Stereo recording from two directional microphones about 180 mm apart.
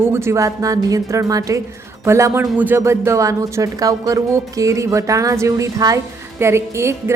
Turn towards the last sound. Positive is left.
turn(degrees=-15)  # may be behind; listen again after turning